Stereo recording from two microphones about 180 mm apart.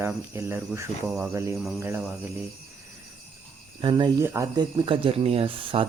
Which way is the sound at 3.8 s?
25° right (ahead or behind).